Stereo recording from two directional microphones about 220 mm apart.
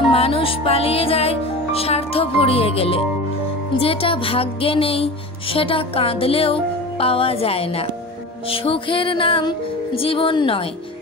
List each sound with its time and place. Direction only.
0.1 s music: 25° left (ahead or behind)